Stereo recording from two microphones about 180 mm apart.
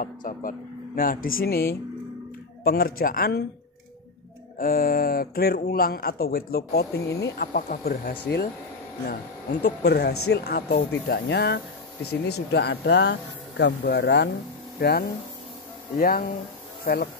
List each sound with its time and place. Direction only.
0.0 s speech: 50° left (ahead or behind)
4.6 s speech: 55° left (ahead or behind)
7.5 s speech: 50° left (ahead or behind); by 14.3 s 70° left (ahead or behind)
14.8 s speech: 60° left (ahead or behind)